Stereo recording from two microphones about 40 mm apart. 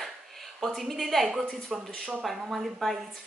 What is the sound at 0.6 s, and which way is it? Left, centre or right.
A woman's voice, centre.